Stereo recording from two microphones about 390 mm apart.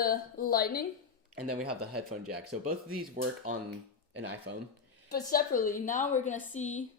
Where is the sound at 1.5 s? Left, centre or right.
Right.